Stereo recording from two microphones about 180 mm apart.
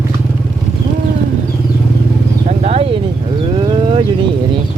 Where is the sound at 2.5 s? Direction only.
35° right (ahead or behind).